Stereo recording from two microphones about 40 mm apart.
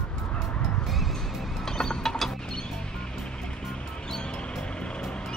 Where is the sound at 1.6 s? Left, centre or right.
Centre.